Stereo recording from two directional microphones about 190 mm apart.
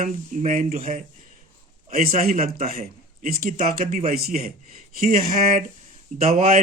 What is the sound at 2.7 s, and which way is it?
Speech, 50° right (ahead or behind).